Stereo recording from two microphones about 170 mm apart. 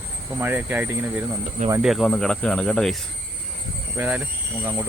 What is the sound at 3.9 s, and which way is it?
Speech, 5° right (ahead or behind).